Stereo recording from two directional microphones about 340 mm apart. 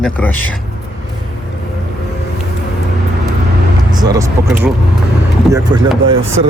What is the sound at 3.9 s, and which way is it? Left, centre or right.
Speech, centre.